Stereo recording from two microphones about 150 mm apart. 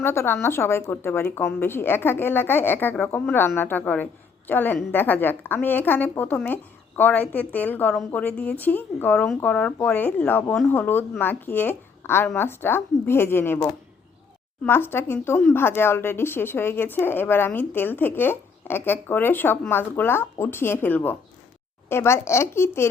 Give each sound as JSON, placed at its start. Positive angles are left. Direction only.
{"t": 0.0, "sound": "a woman's voice", "side_deg": 15}